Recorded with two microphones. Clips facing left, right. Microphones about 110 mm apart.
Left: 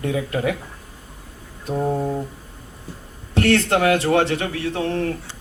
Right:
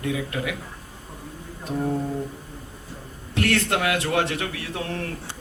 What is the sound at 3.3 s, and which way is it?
A man's voice, 30° left (ahead or behind).